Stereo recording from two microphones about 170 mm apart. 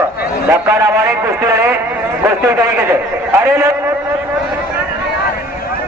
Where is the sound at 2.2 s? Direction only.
15° right (ahead or behind).